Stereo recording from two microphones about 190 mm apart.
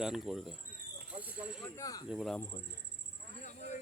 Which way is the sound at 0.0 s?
Centre (ahead or behind).